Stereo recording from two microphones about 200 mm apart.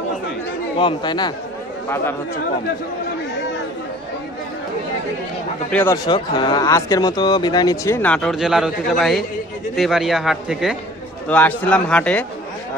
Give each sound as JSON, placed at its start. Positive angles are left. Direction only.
{"t": 0.7, "sound": "speech", "side_deg": 25}
{"t": 5.7, "sound": "speech", "side_deg": 5}
{"t": 6.0, "sound": "a man's voice", "side_deg": 25}
{"t": 11.2, "sound": "speech", "side_deg": 10}